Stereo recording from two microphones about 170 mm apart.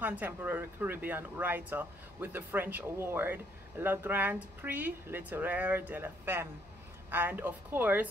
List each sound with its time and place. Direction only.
0.0 s speech: 10° right (ahead or behind)